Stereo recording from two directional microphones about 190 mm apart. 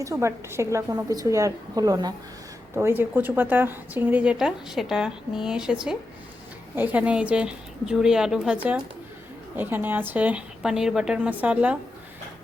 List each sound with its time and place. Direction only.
0.0 s a woman's voice: 15° right (ahead or behind)